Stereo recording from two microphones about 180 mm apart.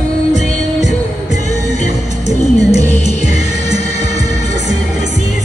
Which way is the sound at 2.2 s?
35° left (ahead or behind).